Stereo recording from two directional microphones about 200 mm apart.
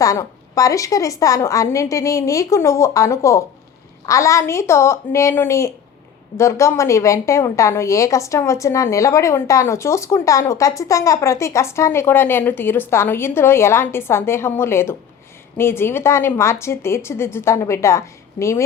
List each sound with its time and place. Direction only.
0.0 s a woman's voice: 15° left (ahead or behind)